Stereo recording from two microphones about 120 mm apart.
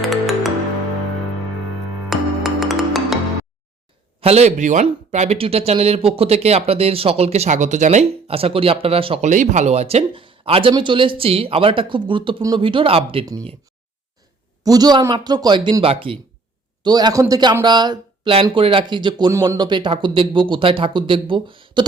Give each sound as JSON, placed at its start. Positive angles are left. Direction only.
{"t": 0.0, "sound": "music", "side_deg": 0}
{"t": 2.0, "sound": "music", "side_deg": 0}
{"t": 4.2, "sound": "speech", "side_deg": -60}
{"t": 5.4, "sound": "speech", "side_deg": -55}
{"t": 8.3, "sound": "speech", "side_deg": -50}
{"t": 9.2, "sound": "speech", "side_deg": -85}
{"t": 14.6, "sound": "speech", "side_deg": -30}
{"t": 16.8, "sound": "speech", "side_deg": -35}
{"t": 19.3, "sound": "speech", "side_deg": -25}
{"t": 19.5, "sound": "speech", "side_deg": -40}